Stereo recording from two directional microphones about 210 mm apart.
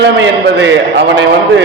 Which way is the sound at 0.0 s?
55° right (ahead or behind).